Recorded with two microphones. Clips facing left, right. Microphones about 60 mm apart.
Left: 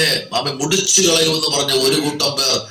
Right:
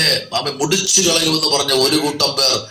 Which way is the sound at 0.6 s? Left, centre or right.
Right.